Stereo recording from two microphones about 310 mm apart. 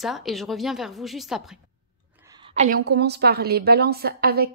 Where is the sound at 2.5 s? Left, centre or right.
Right.